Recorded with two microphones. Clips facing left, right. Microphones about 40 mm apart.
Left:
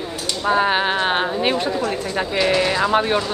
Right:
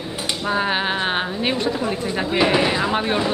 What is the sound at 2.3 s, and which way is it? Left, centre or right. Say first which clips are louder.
Speech: right 1 dB; centre.